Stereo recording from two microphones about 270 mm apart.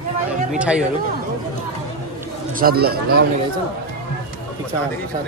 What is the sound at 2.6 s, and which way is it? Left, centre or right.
Speech, right.